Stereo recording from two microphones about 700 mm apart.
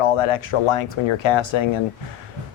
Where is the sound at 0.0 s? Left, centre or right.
Left.